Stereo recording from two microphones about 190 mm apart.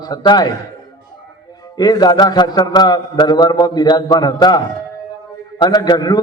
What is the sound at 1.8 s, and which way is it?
A man's voice, 20° left (ahead or behind).